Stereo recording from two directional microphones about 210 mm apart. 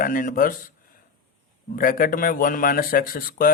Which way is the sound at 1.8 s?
40° left (ahead or behind).